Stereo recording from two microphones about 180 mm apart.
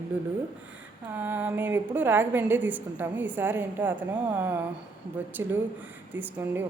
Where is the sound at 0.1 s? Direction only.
10° right (ahead or behind).